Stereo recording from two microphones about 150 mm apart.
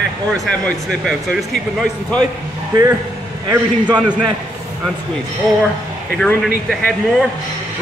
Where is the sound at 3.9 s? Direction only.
10° right (ahead or behind).